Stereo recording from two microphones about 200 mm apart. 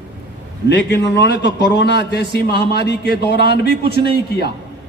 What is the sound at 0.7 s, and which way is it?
A man's voice, 55° left (ahead or behind).